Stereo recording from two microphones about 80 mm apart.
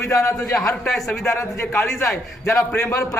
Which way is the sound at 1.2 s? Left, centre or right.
Left.